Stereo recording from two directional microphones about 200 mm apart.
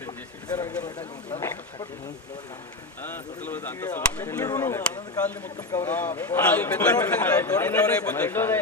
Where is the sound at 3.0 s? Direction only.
10° left (ahead or behind).